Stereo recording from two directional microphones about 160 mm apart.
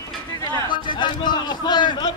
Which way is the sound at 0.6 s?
30° left (ahead or behind).